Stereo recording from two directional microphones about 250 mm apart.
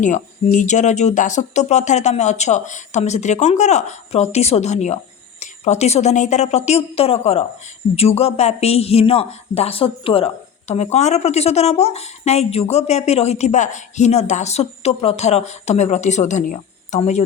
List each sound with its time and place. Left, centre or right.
0.0 s a woman's voice: left